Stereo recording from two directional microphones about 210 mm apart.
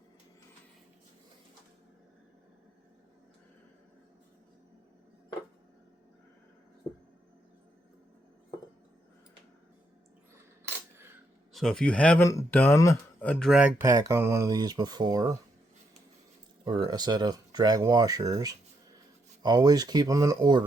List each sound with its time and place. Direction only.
10.9 s a sound: 10° right (ahead or behind)
11.5 s a man's voice: 5° left (ahead or behind); by 15.4 s 15° right (ahead or behind)
16.6 s speech: 20° right (ahead or behind)